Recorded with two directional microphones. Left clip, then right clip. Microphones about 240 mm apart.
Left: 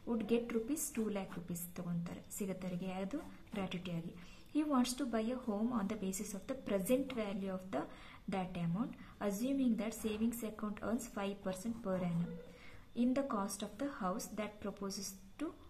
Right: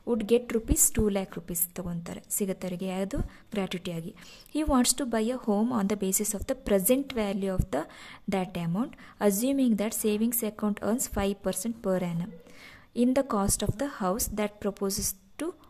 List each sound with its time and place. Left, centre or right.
0.2 s speech: right